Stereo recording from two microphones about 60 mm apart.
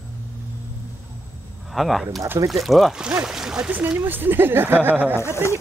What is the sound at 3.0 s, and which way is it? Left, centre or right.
Speech, centre.